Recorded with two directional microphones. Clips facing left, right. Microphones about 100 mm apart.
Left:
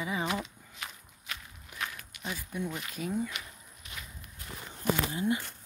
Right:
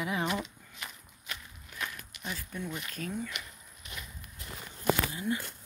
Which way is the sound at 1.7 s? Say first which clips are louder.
Left 1 dB; 15° left (ahead or behind).